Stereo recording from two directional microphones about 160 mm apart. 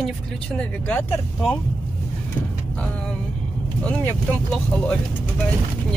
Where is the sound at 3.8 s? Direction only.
10° left (ahead or behind).